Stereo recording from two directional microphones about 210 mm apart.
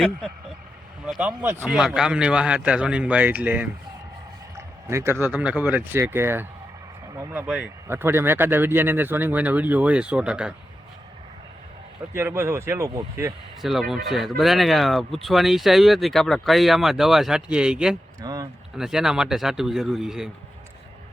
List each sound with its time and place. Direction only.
1.0 s speech: 5° right (ahead or behind)
4.5 s a sound: 15° right (ahead or behind)
5.2 s speech: 5° right (ahead or behind)
12.1 s speech: 10° right (ahead or behind)
13.6 s speech: centre (ahead or behind)
18.2 s speech: 15° right (ahead or behind)
18.8 s speech: centre (ahead or behind)